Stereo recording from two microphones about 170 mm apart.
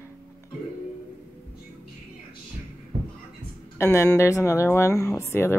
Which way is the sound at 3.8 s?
15° left (ahead or behind).